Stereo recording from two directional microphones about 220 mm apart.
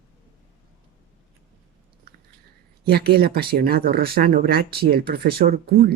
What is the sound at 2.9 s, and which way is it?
Speech, 45° right (ahead or behind).